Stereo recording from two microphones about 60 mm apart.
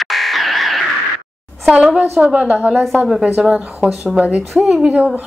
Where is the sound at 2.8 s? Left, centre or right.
Centre.